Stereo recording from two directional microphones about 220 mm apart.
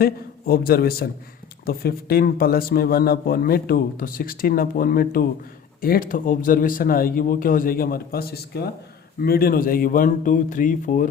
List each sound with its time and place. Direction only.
0.0 s a man's voice: 40° left (ahead or behind)